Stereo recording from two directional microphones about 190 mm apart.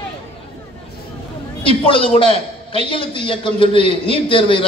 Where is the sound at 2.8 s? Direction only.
25° left (ahead or behind).